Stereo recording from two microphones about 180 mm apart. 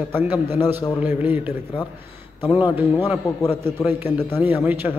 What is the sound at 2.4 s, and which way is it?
Speech, 30° left (ahead or behind).